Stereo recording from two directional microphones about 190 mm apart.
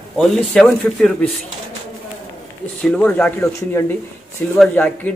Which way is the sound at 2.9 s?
10° left (ahead or behind).